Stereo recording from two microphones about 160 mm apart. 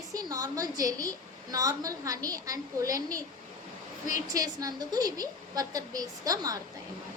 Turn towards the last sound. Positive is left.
turn(degrees=-20)  # may be behind; listen again after turning